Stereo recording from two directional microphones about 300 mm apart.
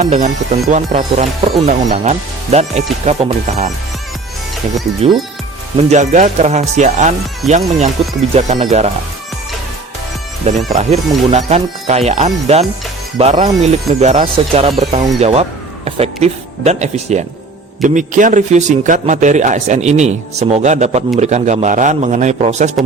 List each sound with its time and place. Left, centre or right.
0.0 s speech: right
5.7 s speech: right
10.4 s speech: right